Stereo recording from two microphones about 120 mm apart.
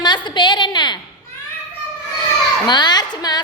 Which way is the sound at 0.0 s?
40° left (ahead or behind).